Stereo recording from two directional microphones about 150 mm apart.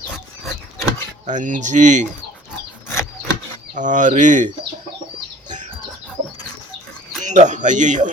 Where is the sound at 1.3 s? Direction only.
60° right (ahead or behind).